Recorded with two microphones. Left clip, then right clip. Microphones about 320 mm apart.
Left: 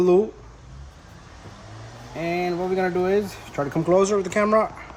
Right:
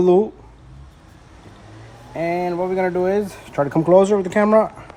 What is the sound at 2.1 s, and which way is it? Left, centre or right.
Speech, centre.